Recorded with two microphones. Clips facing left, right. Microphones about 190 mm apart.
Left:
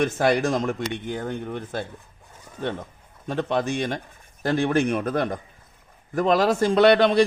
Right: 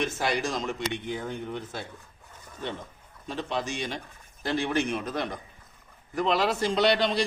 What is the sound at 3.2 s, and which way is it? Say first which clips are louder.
Speech: left 7 dB; 55° left (ahead or behind).